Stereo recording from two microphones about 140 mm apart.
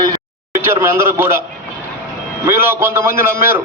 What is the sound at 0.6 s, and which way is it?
Speech, 15° right (ahead or behind).